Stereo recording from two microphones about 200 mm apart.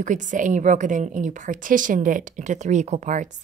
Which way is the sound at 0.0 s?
40° right (ahead or behind).